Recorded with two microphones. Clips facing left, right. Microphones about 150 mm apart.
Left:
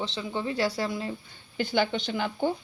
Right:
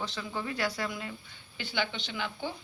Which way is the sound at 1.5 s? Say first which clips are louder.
Left 8 dB; 45° left (ahead or behind).